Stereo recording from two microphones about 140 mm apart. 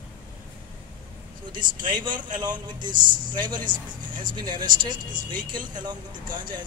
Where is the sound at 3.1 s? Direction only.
75° right (ahead or behind).